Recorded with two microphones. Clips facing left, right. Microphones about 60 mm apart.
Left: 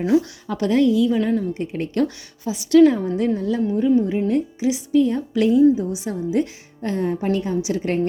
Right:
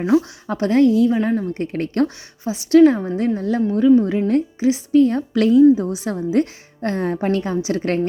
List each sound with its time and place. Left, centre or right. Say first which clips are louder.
0.1 s a woman's voice: right 3 dB; right
1.5 s a woman's voice: right 2 dB; right
2.4 s a woman's voice: right 1 dB; right
3.8 s a woman's voice: right 5 dB; right